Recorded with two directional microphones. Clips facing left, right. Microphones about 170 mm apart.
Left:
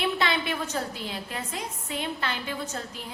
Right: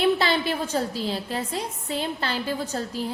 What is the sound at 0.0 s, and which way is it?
A woman's voice, 35° right (ahead or behind).